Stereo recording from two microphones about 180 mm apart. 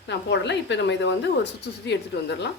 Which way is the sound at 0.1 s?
75° left (ahead or behind).